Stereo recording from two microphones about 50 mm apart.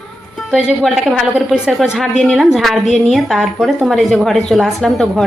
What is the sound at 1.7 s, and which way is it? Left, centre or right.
Speech, centre.